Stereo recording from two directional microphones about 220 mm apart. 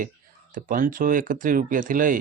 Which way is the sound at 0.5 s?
40° right (ahead or behind).